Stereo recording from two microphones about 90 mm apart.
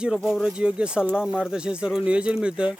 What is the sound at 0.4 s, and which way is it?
Speech, 10° right (ahead or behind).